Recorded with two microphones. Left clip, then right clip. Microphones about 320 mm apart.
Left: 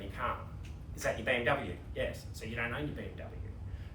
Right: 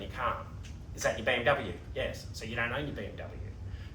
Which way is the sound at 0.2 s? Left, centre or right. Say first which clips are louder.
Right 3 dB; centre.